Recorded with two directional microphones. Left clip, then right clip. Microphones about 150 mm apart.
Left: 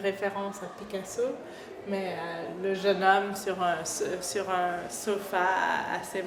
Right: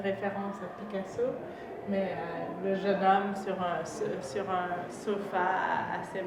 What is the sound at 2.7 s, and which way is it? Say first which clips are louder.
A woman's voice: left 2 dB; 45° left (ahead or behind).